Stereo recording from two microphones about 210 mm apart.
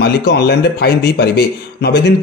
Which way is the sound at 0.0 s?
50° left (ahead or behind).